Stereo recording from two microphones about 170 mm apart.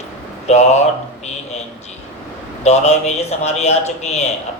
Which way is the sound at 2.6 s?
40° left (ahead or behind).